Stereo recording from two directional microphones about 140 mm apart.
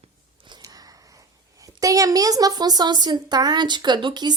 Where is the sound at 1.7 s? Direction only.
25° right (ahead or behind).